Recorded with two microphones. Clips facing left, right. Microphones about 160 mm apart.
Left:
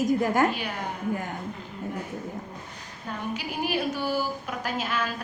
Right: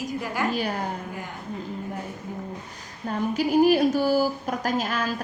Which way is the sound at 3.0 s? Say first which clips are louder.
Right 8 dB; 40° right (ahead or behind).